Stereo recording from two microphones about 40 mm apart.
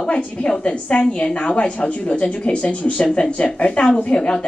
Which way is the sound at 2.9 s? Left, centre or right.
Left.